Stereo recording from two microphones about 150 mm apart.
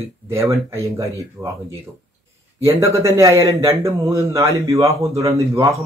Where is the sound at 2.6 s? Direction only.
20° right (ahead or behind).